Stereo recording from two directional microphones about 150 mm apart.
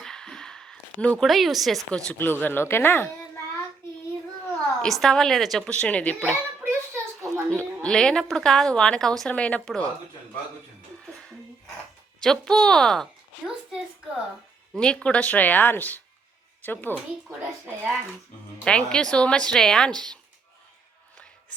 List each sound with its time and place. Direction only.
0.0 s a sound: 5° left (ahead or behind)
2.0 s speech: 15° left (ahead or behind)
4.4 s a woman's voice: 5° left (ahead or behind)
6.6 s a sound: 15° right (ahead or behind)
7.6 s a woman's voice: 5° left (ahead or behind)
12.2 s a woman's voice: 5° left (ahead or behind)
14.8 s speech: 5° left (ahead or behind)
18.6 s a woman's voice: 5° left (ahead or behind)